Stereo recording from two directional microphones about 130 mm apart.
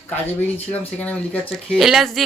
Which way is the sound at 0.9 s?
10° left (ahead or behind).